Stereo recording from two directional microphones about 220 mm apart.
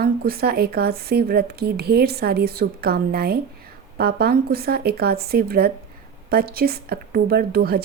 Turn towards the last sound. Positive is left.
turn(degrees=-45)  # may be behind; listen again after turning